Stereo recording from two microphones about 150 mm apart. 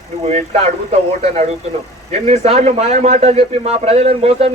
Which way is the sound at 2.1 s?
45° right (ahead or behind).